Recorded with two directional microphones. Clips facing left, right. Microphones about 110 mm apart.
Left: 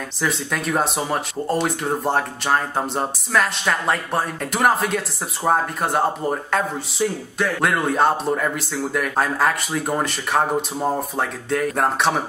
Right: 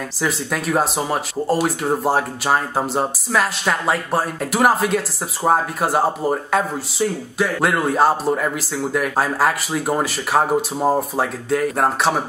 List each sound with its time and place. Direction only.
0.2 s speech: centre (ahead or behind)